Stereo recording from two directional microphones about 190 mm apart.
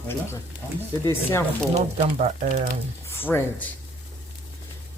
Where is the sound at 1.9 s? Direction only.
40° right (ahead or behind).